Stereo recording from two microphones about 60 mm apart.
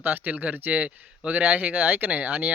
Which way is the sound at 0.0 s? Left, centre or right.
Right.